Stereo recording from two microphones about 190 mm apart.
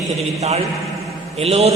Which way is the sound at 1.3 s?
35° right (ahead or behind).